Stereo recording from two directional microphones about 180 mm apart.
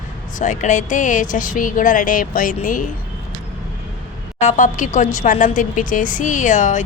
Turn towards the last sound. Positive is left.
turn(degrees=45)  # may be behind; listen again after turning